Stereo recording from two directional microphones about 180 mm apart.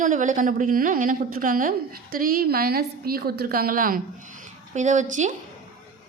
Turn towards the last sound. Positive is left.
turn(degrees=-45)  # may be behind; listen again after turning